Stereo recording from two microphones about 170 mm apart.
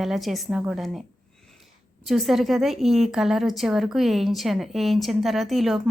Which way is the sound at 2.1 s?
Centre (ahead or behind).